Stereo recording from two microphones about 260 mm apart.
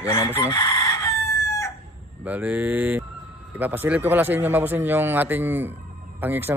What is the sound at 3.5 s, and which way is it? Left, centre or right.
Speech, centre.